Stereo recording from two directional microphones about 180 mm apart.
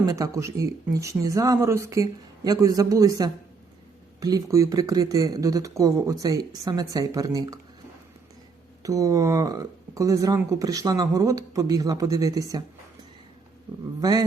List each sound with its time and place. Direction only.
0.0 s speech: 20° right (ahead or behind)
8.8 s speech: 20° right (ahead or behind)
14.0 s speech: 20° right (ahead or behind)